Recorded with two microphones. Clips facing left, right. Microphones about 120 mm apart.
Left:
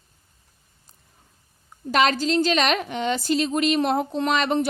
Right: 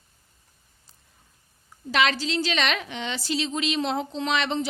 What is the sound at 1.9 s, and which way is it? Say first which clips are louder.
A woman's voice: left 4 dB; 45° left (ahead or behind).